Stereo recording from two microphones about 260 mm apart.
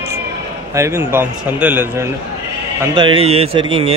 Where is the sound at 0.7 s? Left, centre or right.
Centre.